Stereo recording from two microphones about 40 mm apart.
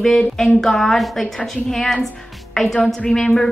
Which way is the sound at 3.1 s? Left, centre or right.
Centre.